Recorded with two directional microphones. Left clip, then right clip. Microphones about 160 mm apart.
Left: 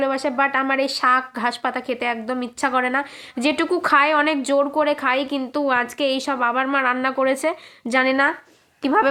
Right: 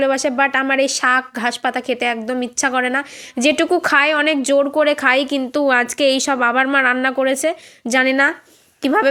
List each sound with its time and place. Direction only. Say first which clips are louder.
0.0 s speech: right 4 dB; 25° right (ahead or behind)